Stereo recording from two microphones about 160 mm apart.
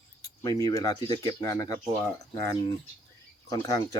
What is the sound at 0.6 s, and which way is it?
Speech, 20° left (ahead or behind).